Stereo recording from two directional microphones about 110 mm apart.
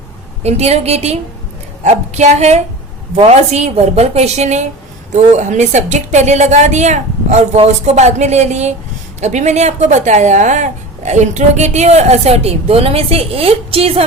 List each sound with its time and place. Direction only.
0.4 s a woman's voice: 75° right (ahead or behind)
1.8 s a woman's voice: 90° right; by 14.0 s 60° right (ahead or behind)